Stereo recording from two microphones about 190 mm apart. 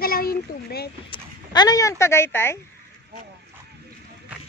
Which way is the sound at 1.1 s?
20° left (ahead or behind).